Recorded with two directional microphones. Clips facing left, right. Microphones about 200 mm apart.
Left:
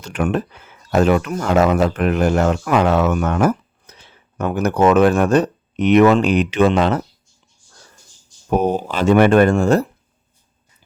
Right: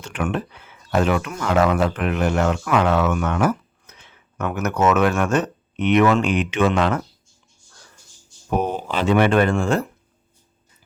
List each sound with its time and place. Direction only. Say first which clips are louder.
0.0 s speech: left 4 dB; 40° left (ahead or behind)
8.4 s speech: left 5 dB; 40° left (ahead or behind)